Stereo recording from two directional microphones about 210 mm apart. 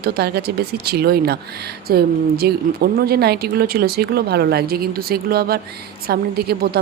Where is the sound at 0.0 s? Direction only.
50° right (ahead or behind).